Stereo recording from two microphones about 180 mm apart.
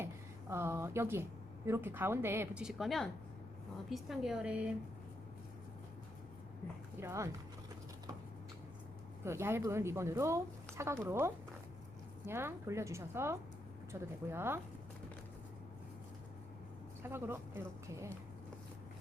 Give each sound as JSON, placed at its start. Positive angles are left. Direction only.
{"t": 0.0, "sound": "a woman's voice", "side_deg": -15}
{"t": 2.6, "sound": "a woman's voice", "side_deg": 0}
{"t": 7.0, "sound": "a woman's voice", "side_deg": -15}
{"t": 9.2, "sound": "a woman's voice", "side_deg": -15}
{"t": 17.0, "sound": "a woman's voice", "side_deg": -15}